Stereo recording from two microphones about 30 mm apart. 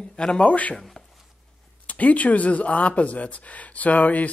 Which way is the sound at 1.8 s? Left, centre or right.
Left.